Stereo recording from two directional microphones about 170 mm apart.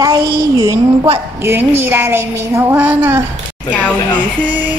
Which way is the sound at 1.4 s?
15° right (ahead or behind).